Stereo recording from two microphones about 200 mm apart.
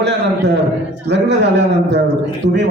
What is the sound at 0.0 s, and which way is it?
A man's voice, 60° right (ahead or behind).